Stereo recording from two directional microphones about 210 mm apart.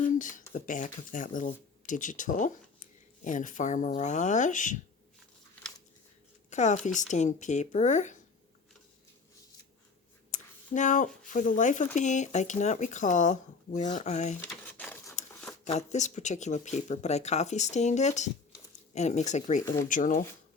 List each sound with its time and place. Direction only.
0.0 s a sound: 40° left (ahead or behind)
0.5 s speech: 40° left (ahead or behind)
6.5 s speech: 35° left (ahead or behind)
10.3 s speech: 35° left (ahead or behind)
14.4 s crumpling: 5° left (ahead or behind)
15.3 s a sound: 10° left (ahead or behind)
15.6 s speech: 35° left (ahead or behind)
19.6 s speech: 15° left (ahead or behind)
19.9 s speech: 40° left (ahead or behind)